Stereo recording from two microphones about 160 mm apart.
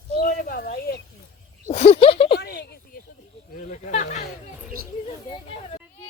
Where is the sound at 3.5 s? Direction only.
50° left (ahead or behind).